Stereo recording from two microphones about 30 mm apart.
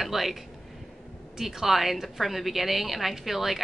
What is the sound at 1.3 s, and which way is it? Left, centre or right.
A woman's voice, centre.